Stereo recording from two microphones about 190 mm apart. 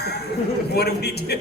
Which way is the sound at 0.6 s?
60° left (ahead or behind).